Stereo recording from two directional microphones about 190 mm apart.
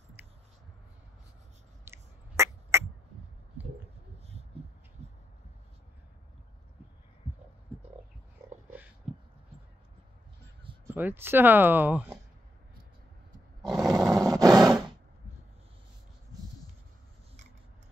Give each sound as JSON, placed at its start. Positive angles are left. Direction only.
{"t": 1.9, "sound": "a sound", "side_deg": -15}
{"t": 10.9, "sound": "speech", "side_deg": -10}
{"t": 13.7, "sound": "roar", "side_deg": -20}